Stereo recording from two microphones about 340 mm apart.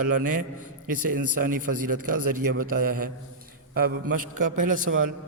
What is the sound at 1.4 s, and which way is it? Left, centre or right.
A man's voice, right.